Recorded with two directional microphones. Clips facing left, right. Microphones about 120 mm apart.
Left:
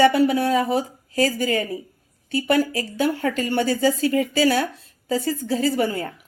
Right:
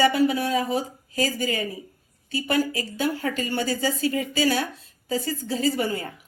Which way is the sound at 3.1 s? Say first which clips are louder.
Left 2 dB; 25° left (ahead or behind).